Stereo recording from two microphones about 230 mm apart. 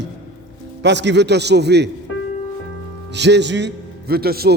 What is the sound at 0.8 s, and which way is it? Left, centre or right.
A man's voice, right.